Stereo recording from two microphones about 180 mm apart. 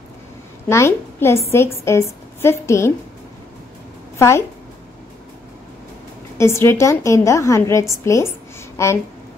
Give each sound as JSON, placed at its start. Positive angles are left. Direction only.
{"t": 0.7, "sound": "a woman's voice", "side_deg": 15}
{"t": 4.2, "sound": "a woman's voice", "side_deg": 15}
{"t": 6.3, "sound": "a woman's voice", "side_deg": 15}
{"t": 8.0, "sound": "a sound", "side_deg": 15}